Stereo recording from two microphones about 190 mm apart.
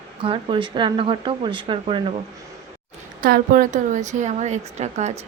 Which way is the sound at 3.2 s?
50° right (ahead or behind).